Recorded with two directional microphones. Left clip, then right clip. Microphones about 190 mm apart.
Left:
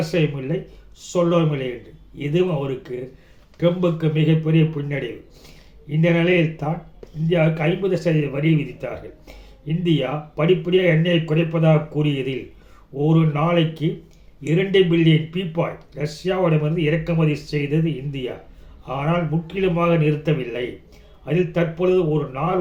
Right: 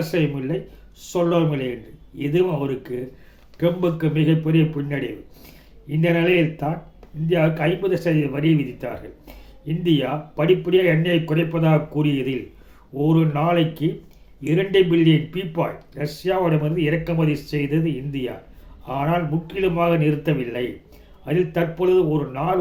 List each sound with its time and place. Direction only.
0.0 s speech: 10° right (ahead or behind)